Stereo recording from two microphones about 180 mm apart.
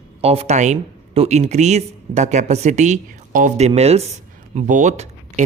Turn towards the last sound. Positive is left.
turn(degrees=-40)  # may be behind; listen again after turning